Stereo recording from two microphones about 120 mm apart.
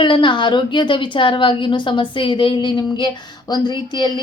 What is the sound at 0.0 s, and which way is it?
A woman's voice, 40° left (ahead or behind).